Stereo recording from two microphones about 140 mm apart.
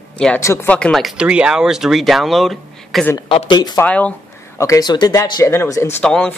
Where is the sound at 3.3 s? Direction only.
35° left (ahead or behind).